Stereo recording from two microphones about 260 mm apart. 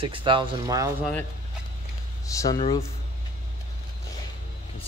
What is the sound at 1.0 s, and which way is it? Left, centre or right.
Speech, centre.